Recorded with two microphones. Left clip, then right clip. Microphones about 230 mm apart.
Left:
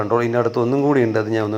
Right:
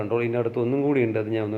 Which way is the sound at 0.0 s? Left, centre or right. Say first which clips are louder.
Left 6 dB; centre.